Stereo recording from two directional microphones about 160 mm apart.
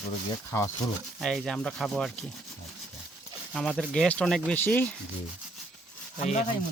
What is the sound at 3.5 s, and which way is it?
Speech, centre (ahead or behind).